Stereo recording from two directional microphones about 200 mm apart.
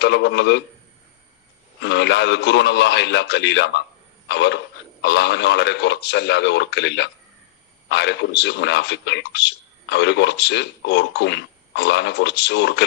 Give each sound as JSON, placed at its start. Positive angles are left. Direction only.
{"t": 0.0, "sound": "a man's voice", "side_deg": 60}
{"t": 1.8, "sound": "a man's voice", "side_deg": 60}